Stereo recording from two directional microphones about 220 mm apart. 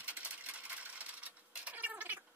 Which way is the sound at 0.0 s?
5° right (ahead or behind).